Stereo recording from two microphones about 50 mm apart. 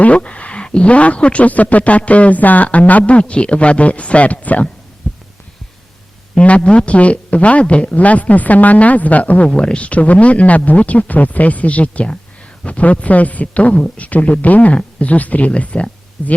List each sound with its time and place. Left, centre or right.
0.0 s speech: left
5.1 s heart sounds: centre
6.3 s a man's voice: left
9.5 s speech: centre